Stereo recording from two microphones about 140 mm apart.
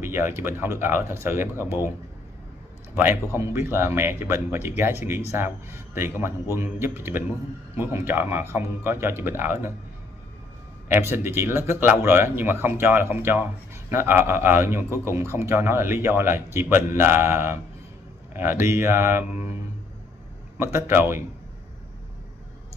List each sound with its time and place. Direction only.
0.0 s a man's voice: 15° right (ahead or behind)
10.9 s a man's voice: 15° right (ahead or behind)
20.5 s a man's voice: 20° right (ahead or behind)